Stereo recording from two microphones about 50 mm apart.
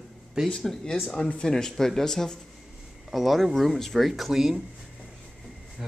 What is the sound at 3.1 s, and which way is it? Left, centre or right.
Speech, centre.